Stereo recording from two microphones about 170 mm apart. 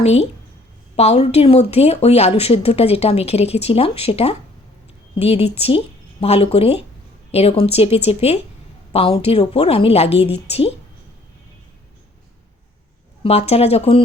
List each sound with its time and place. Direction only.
0.0 s speech: 40° left (ahead or behind)
13.2 s speech: 40° left (ahead or behind)